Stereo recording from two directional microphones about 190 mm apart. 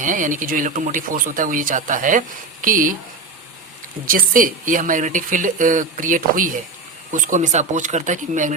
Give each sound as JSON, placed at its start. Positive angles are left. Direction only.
{"t": 0.0, "sound": "speech", "side_deg": -45}
{"t": 4.0, "sound": "speech", "side_deg": -45}